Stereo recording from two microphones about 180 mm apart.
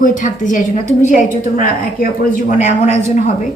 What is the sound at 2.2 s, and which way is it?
Speech, 45° left (ahead or behind).